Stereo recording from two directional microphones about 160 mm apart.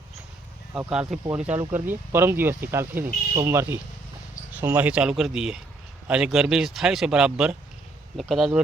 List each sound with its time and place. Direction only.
0.7 s speech: 5° right (ahead or behind)